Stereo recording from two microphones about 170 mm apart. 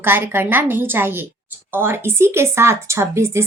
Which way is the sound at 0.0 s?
15° right (ahead or behind).